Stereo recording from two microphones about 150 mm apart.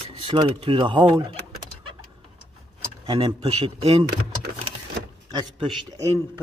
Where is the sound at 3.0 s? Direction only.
40° right (ahead or behind).